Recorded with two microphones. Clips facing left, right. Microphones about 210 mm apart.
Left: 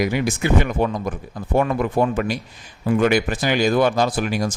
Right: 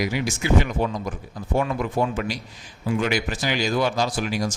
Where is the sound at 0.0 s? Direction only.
55° left (ahead or behind).